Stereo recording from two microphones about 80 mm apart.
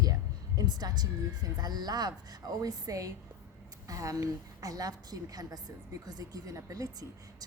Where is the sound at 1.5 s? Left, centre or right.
Right.